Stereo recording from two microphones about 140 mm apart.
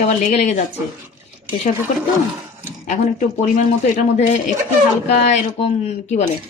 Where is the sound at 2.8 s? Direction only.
55° left (ahead or behind).